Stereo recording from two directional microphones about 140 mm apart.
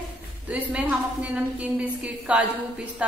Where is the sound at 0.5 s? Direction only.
10° right (ahead or behind).